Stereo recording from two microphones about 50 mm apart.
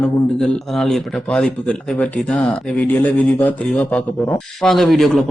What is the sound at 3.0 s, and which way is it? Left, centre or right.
Speech, left.